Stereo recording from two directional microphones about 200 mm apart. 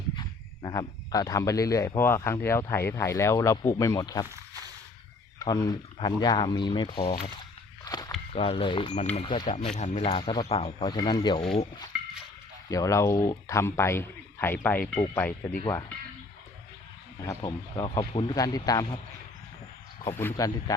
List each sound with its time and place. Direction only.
0.2 s speech: 20° left (ahead or behind)
5.4 s speech: 20° left (ahead or behind)
7.9 s a sound: 20° left (ahead or behind)
8.3 s speech: 25° left (ahead or behind)
12.7 s speech: 15° left (ahead or behind)
17.2 s speech: 20° left (ahead or behind)
20.1 s speech: 15° left (ahead or behind)